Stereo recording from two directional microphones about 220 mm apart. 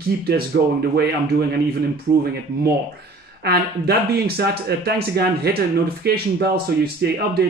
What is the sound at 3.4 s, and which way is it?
Speech, 45° right (ahead or behind).